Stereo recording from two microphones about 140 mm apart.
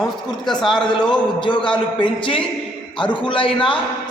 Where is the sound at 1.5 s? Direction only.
35° left (ahead or behind).